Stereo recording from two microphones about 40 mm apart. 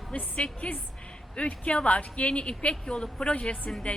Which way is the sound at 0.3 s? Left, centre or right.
Left.